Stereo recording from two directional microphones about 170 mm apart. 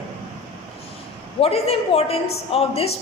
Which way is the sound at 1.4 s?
35° left (ahead or behind).